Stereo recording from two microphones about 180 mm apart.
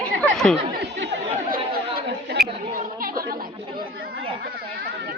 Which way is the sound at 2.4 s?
Centre (ahead or behind).